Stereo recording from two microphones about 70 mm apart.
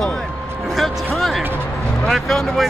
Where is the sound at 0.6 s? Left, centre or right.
Centre.